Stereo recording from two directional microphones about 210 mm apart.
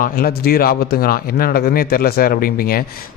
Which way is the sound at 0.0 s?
45° left (ahead or behind).